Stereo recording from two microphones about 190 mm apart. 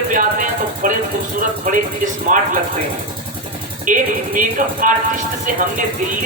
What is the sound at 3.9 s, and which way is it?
Speech, 45° right (ahead or behind).